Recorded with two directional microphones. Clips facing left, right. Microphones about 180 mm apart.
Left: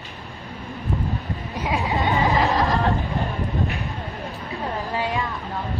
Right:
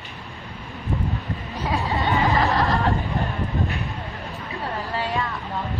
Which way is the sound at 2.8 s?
Centre (ahead or behind).